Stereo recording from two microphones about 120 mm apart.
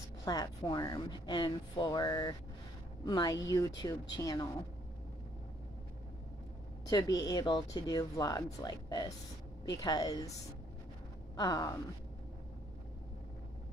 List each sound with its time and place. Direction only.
0.2 s speech: 30° left (ahead or behind)
6.9 s speech: 30° left (ahead or behind)
11.3 s speech: 35° left (ahead or behind)